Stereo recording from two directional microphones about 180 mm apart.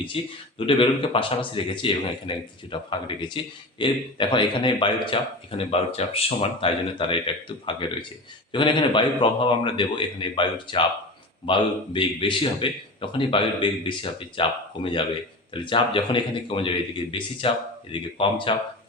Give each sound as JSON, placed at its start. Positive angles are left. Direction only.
{"t": 0.1, "sound": "a man's voice", "side_deg": 30}